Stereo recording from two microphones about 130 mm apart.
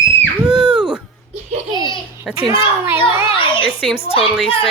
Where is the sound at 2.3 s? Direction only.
5° right (ahead or behind).